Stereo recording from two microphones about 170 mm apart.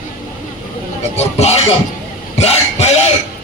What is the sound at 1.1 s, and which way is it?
Speech, 40° left (ahead or behind).